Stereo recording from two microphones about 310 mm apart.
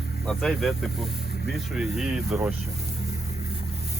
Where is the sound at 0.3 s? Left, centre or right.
Centre.